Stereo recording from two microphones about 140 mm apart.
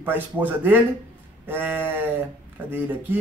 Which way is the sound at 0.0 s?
15° right (ahead or behind).